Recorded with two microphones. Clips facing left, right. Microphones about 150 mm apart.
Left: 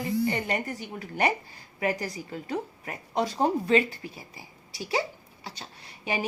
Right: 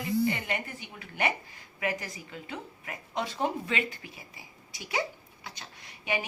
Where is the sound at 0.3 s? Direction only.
35° left (ahead or behind).